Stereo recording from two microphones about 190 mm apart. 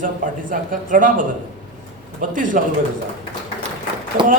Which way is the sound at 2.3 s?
45° right (ahead or behind).